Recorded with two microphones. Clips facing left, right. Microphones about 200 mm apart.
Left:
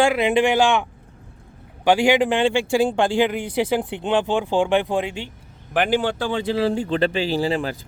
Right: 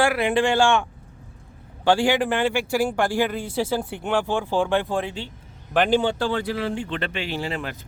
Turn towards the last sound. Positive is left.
turn(degrees=35)  # may be behind; listen again after turning